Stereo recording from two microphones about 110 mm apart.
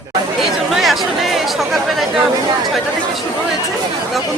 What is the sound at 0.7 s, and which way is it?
Chatter, centre (ahead or behind).